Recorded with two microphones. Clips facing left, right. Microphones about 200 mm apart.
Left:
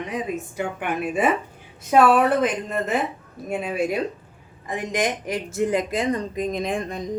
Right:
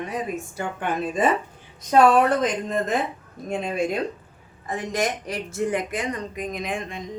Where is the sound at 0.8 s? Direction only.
10° left (ahead or behind).